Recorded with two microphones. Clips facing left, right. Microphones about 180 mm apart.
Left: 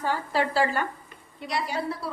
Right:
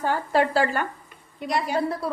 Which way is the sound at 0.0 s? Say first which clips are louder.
Right 4 dB; 50° right (ahead or behind).